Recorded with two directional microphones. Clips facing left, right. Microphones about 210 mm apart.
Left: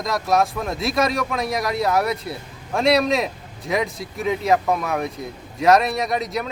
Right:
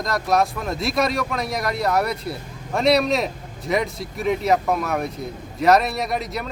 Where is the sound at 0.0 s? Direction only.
Centre (ahead or behind).